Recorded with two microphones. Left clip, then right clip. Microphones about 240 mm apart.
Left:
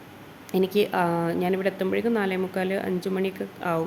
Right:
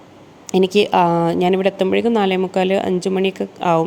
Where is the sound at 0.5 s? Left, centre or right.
Right.